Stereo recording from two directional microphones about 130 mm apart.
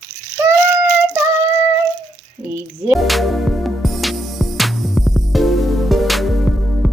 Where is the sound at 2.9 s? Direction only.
Centre (ahead or behind).